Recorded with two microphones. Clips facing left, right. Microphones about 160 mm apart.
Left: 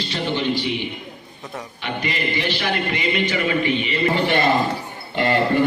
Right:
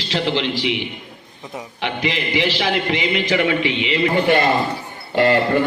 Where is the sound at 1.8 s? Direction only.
90° right.